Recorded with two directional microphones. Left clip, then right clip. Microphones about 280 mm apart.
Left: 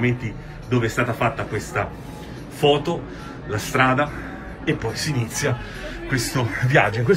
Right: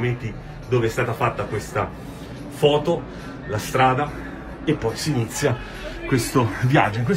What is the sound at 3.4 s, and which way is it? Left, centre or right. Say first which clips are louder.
A man's voice: right 1 dB; centre.